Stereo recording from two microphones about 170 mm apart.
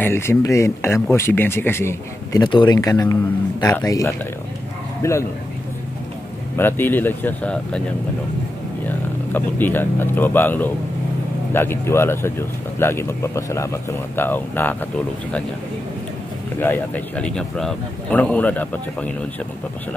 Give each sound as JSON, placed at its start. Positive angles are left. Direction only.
{"t": 0.0, "sound": "speech", "side_deg": 15}
{"t": 2.4, "sound": "speech", "side_deg": 25}
{"t": 6.5, "sound": "speech", "side_deg": 10}
{"t": 8.8, "sound": "speech", "side_deg": 10}
{"t": 16.5, "sound": "speech", "side_deg": 10}